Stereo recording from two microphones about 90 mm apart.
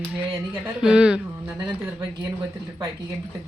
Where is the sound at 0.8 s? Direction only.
10° right (ahead or behind).